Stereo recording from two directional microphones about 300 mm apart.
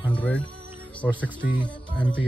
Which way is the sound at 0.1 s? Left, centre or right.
Centre.